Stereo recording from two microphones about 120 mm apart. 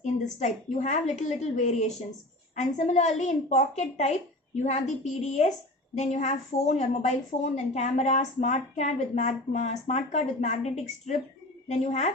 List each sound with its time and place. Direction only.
0.0 s a woman's voice: 85° left
2.6 s a woman's voice: 85° left